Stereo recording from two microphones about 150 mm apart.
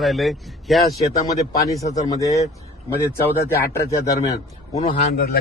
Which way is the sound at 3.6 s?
20° left (ahead or behind).